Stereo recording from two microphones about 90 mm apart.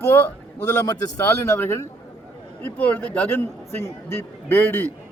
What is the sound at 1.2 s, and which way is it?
Speech, 30° left (ahead or behind).